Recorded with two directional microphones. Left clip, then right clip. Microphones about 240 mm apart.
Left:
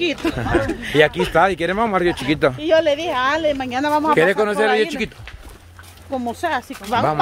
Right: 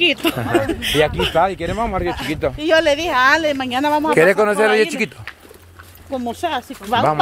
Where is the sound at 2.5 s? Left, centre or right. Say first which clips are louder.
Right 1 dB; right.